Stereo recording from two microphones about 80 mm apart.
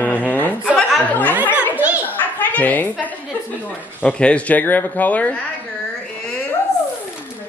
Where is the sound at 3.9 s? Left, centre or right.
Centre.